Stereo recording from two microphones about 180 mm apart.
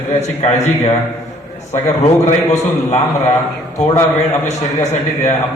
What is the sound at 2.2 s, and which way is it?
Speech, 35° left (ahead or behind).